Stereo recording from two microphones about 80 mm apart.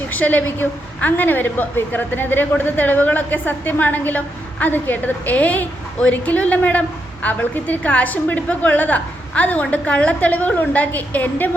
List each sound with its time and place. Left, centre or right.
0.1 s a woman's voice: left